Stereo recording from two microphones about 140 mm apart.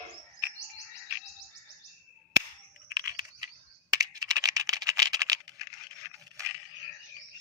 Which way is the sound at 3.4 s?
25° right (ahead or behind).